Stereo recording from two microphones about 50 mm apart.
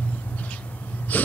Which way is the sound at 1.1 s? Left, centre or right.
Left.